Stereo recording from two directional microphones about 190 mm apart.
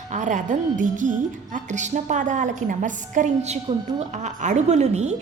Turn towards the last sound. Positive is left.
turn(degrees=-35)  # may be behind; listen again after turning